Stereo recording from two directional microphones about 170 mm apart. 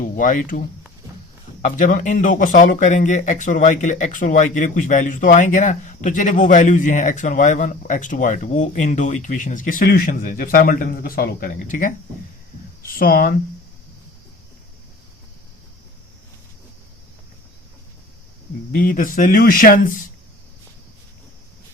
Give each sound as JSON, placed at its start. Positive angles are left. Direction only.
{"t": 0.0, "sound": "speech", "side_deg": 50}
{"t": 1.6, "sound": "speech", "side_deg": 50}
{"t": 18.7, "sound": "speech", "side_deg": 55}